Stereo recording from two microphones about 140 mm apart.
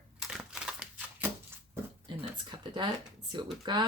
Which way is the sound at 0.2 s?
5° right (ahead or behind).